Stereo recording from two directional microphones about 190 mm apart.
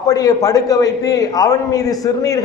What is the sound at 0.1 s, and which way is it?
A man's voice, 20° left (ahead or behind).